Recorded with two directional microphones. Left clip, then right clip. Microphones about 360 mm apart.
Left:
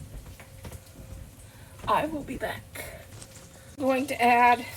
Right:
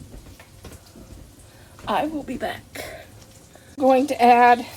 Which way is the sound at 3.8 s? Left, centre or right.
Right.